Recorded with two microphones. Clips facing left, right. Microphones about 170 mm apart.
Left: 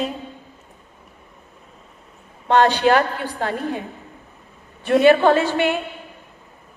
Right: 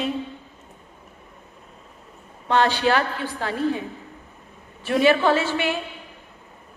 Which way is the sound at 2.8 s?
50° left (ahead or behind).